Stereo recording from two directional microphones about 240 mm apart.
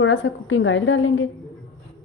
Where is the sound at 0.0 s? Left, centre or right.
Left.